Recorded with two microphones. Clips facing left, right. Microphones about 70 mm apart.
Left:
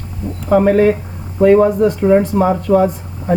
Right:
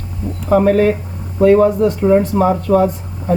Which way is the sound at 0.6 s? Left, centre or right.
Centre.